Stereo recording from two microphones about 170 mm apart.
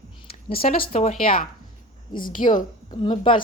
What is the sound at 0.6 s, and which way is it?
Speech, 60° left (ahead or behind).